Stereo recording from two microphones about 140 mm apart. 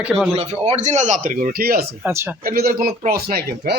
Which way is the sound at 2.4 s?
90° right.